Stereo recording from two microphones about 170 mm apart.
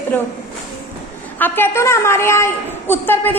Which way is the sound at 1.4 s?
10° left (ahead or behind).